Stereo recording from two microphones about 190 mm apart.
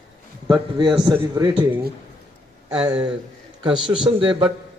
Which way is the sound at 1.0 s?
20° right (ahead or behind).